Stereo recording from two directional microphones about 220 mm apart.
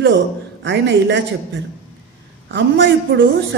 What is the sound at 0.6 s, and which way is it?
Speech, 50° right (ahead or behind).